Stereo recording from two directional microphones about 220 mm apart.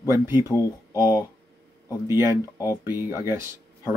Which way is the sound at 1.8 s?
10° right (ahead or behind).